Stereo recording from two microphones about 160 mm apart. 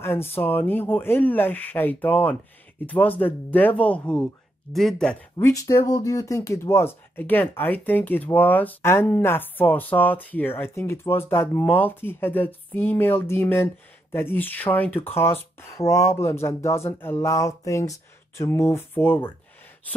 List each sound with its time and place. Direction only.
0.0 s speech: 15° left (ahead or behind)
5.4 s speech: 20° left (ahead or behind)